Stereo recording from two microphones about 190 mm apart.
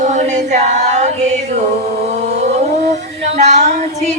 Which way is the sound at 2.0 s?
35° right (ahead or behind).